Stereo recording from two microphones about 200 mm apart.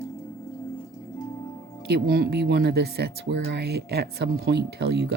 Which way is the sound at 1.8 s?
55° right (ahead or behind).